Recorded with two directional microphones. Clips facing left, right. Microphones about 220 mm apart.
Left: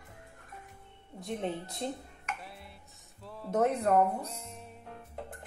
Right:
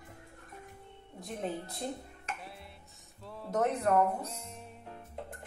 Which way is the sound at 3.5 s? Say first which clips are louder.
Left 2 dB; 25° left (ahead or behind).